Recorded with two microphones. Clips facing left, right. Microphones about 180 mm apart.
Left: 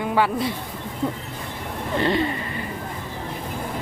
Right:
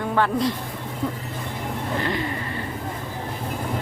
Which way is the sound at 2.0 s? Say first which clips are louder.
Left 7 dB; 25° left (ahead or behind).